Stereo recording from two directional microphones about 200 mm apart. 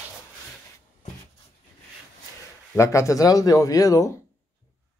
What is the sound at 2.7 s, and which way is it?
Speech, 15° left (ahead or behind).